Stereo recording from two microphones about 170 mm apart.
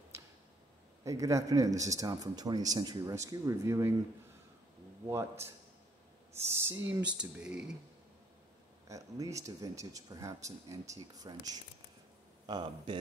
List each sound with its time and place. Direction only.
0.1 s a sound: 15° right (ahead or behind)
1.0 s speech: 20° right (ahead or behind)
5.0 s speech: 15° right (ahead or behind)
8.8 s speech: 20° right (ahead or behind)